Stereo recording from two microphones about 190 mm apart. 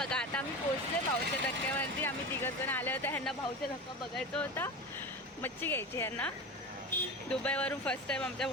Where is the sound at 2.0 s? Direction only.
10° left (ahead or behind).